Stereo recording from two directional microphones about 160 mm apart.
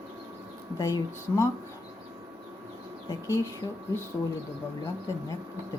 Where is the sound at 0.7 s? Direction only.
20° left (ahead or behind).